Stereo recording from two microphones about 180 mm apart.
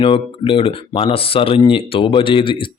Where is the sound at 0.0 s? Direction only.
30° left (ahead or behind).